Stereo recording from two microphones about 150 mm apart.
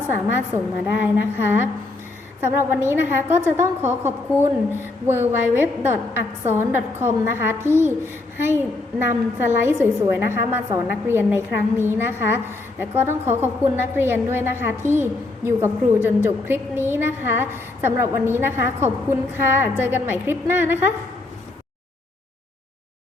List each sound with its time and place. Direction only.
0.1 s a woman's voice: 15° right (ahead or behind)